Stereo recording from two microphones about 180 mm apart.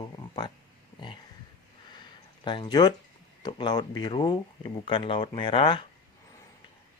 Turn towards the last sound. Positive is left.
turn(degrees=30)  # may be behind; listen again after turning